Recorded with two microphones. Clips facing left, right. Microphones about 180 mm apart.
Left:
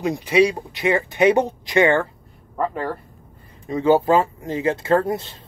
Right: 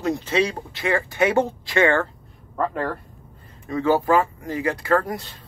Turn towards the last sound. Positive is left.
turn(degrees=25)  # may be behind; listen again after turning